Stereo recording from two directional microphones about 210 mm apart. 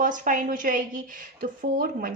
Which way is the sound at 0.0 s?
40° right (ahead or behind).